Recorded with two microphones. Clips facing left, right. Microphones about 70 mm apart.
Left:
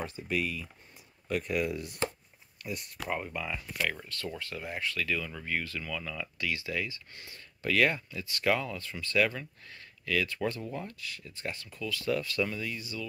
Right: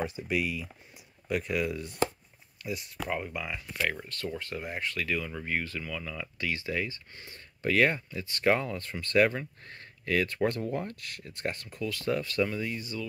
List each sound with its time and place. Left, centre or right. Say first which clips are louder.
0.0 s speech: right 2 dB; centre
3.7 s speech: right 3 dB; centre
4.4 s speech: right 1 dB; right
5.2 s speech: right 2 dB; centre
5.8 s speech: even; centre
6.3 s speech: right 2 dB; right
11.4 s speech: right 4 dB; right
12.1 s speech: right 2 dB; right